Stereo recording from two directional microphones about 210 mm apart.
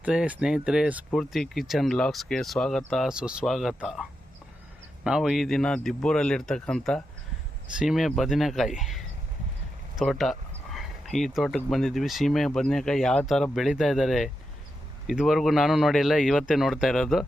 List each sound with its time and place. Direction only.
0.0 s speech: 5° right (ahead or behind)
5.0 s speech: centre (ahead or behind)